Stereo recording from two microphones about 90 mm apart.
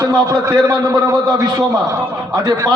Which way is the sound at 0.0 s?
40° right (ahead or behind).